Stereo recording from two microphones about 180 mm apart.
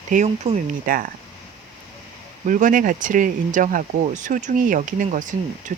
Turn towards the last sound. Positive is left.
turn(degrees=-45)  # may be behind; listen again after turning